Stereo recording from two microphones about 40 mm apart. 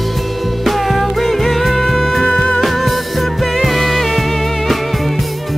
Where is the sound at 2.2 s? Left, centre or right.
Left.